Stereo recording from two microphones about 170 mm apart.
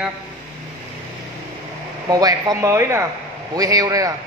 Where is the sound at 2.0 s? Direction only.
20° right (ahead or behind).